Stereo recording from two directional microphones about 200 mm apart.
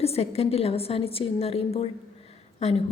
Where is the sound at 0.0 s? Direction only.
30° left (ahead or behind).